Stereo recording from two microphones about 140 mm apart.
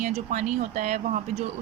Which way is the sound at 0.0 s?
60° right (ahead or behind).